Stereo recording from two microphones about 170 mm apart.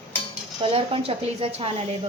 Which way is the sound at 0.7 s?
35° right (ahead or behind).